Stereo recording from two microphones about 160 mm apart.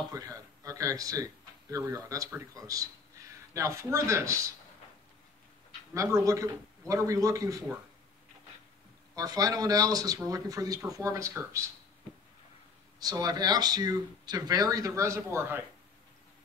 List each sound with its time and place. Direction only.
0.1 s speech: 20° right (ahead or behind)
5.9 s speech: 20° right (ahead or behind)
9.1 s speech: 25° right (ahead or behind)
13.0 s speech: 25° right (ahead or behind)